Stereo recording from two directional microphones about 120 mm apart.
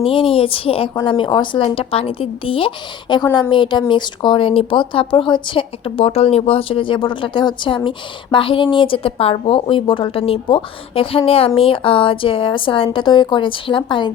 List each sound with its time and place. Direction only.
0.0 s a woman's voice: 50° left (ahead or behind)